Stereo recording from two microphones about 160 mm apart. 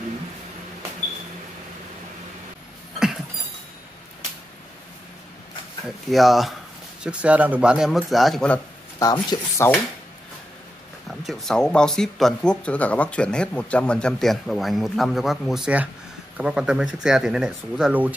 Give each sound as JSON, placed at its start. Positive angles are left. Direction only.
{"t": 6.0, "sound": "speech", "side_deg": 0}
{"t": 9.0, "sound": "speech", "side_deg": 25}
{"t": 11.1, "sound": "speech", "side_deg": 0}